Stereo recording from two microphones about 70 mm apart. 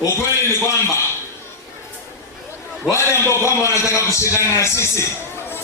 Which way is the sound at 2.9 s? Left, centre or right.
Left.